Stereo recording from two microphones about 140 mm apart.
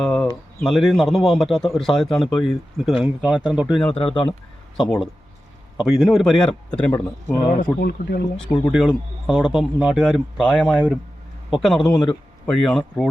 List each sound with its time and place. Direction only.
0.0 s bird: 5° left (ahead or behind)
0.6 s a man's voice: centre (ahead or behind)
3.9 s a man's voice: 40° left (ahead or behind)
4.8 s a man's voice: centre (ahead or behind)
7.5 s speech: 85° left
8.7 s a man's voice: 5° right (ahead or behind)
10.4 s speech: 10° left (ahead or behind)
10.7 s a man's voice: 5° right (ahead or behind)